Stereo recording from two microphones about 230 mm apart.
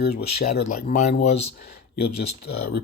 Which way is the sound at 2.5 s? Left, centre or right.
Left.